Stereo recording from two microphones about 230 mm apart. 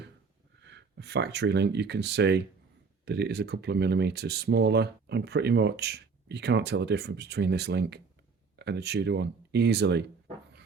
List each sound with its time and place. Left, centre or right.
0.6 s speech: right